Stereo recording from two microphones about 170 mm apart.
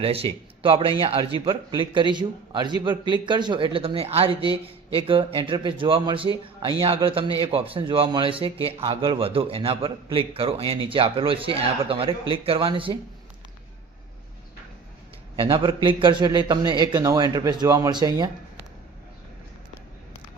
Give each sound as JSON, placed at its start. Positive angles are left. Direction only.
{"t": 0.0, "sound": "a man's voice", "side_deg": -35}
{"t": 15.4, "sound": "a man's voice", "side_deg": -30}